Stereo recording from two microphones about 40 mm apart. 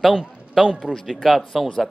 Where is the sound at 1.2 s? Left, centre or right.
Centre.